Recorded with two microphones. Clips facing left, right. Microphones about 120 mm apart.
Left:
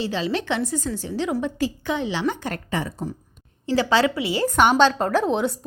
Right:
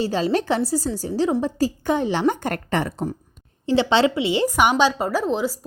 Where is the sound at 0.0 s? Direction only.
40° right (ahead or behind); by 3.1 s 60° right (ahead or behind).